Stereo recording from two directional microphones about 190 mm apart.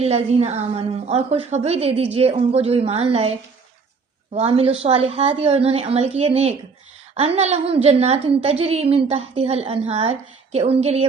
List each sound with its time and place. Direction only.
0.0 s a woman's voice: 35° right (ahead or behind)
4.4 s a woman's voice: 30° right (ahead or behind)